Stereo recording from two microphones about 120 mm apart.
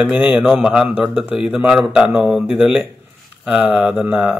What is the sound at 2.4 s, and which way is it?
Speech, 5° right (ahead or behind).